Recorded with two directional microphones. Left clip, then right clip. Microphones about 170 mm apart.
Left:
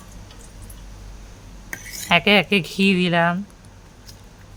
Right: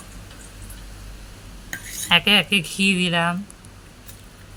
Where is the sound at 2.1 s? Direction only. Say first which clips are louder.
Even; 65° left (ahead or behind).